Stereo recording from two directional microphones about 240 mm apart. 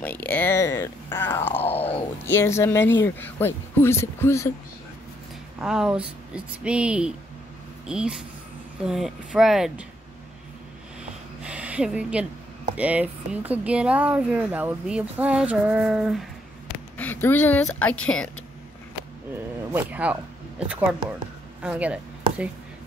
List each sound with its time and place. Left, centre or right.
0.0 s speech: centre
1.8 s speech: left
2.2 s speech: centre
5.6 s speech: centre
11.4 s a sound: centre
12.7 s a woman's voice: centre
19.7 s speech: centre